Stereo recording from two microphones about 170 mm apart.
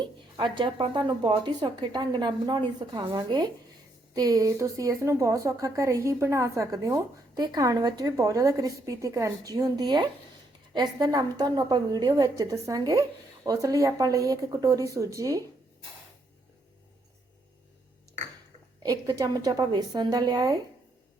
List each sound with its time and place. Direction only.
0.0 s speech: 25° right (ahead or behind)
18.8 s speech: 20° right (ahead or behind)